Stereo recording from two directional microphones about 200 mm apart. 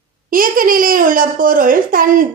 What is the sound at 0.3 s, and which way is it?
A woman's voice, 45° right (ahead or behind).